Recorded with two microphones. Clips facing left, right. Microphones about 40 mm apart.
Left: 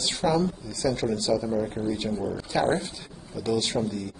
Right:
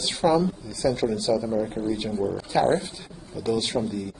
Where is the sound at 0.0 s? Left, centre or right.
Centre.